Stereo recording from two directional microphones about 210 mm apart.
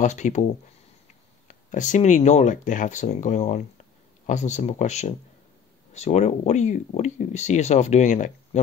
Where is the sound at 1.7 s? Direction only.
35° left (ahead or behind).